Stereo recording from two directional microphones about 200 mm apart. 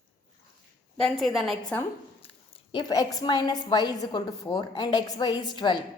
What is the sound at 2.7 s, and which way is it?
A woman's voice, 20° left (ahead or behind).